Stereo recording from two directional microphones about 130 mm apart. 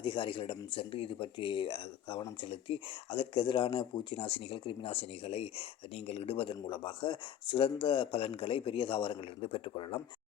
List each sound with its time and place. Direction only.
0.0 s speech: 40° left (ahead or behind)